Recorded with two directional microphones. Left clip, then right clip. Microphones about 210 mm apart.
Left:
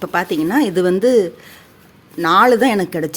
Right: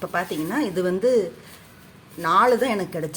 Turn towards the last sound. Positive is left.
turn(degrees=45)  # may be behind; listen again after turning